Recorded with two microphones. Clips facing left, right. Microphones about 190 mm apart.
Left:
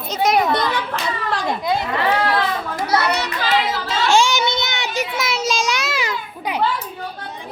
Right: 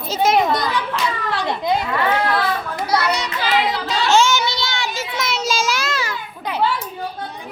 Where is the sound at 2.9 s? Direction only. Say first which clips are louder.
Even; 60° left (ahead or behind).